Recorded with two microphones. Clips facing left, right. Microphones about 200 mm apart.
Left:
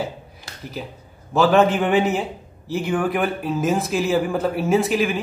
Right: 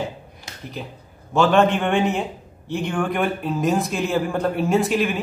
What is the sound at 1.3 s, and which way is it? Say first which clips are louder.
Speech: left 1 dB; 5° left (ahead or behind).